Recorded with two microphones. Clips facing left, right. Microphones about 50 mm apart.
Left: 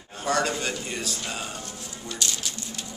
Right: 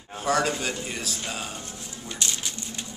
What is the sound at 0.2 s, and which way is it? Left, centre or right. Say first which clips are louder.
A man's voice: right 1 dB; centre.